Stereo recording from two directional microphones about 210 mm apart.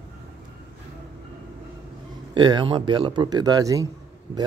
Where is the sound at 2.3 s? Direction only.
20° right (ahead or behind).